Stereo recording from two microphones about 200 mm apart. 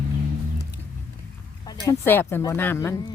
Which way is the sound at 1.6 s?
15° left (ahead or behind).